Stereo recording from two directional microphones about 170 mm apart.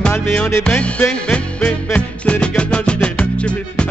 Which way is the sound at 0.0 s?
10° left (ahead or behind).